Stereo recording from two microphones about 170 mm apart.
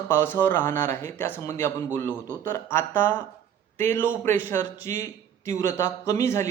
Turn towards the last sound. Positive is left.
turn(degrees=15)  # may be behind; listen again after turning